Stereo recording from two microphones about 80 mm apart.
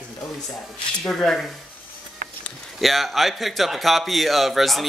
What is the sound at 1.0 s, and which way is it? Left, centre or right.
Speech, centre.